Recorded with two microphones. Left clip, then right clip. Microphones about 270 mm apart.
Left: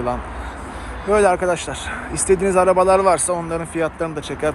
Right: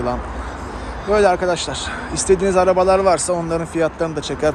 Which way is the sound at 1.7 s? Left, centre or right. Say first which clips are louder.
Right 2 dB; right.